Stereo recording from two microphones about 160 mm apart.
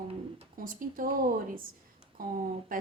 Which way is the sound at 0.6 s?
60° right (ahead or behind).